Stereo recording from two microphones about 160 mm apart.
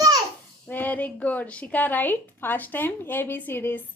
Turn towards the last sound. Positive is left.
turn(degrees=15)  # may be behind; listen again after turning